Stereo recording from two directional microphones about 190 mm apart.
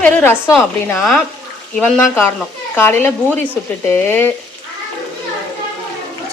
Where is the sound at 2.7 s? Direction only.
10° left (ahead or behind).